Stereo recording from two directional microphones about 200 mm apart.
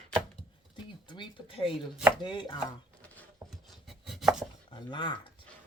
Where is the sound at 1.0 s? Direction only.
25° left (ahead or behind).